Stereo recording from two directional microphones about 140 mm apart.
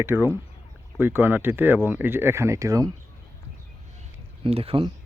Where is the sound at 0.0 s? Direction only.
20° right (ahead or behind).